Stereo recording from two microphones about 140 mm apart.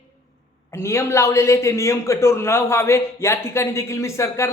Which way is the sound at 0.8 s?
20° left (ahead or behind).